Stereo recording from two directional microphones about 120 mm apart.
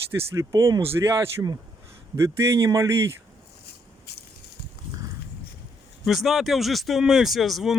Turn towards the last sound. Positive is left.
turn(degrees=0)  # may be behind; listen again after turning